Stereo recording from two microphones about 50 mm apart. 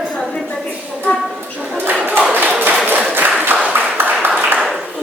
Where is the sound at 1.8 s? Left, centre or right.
Right.